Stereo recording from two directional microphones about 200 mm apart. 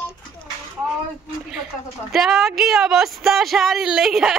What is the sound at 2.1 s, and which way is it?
Speech, centre (ahead or behind).